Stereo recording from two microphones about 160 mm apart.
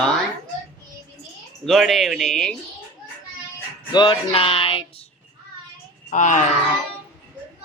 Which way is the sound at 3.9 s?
30° left (ahead or behind).